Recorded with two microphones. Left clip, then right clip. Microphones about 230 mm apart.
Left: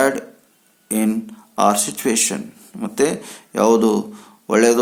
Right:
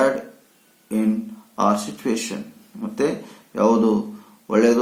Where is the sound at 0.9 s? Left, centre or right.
Left.